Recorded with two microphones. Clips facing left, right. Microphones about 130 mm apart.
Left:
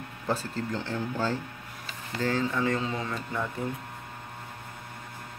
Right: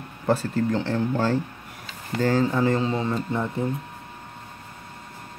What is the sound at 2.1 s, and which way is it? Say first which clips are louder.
Speech: right 7 dB; 50° right (ahead or behind).